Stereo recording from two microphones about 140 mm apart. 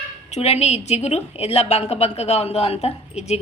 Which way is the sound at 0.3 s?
50° left (ahead or behind).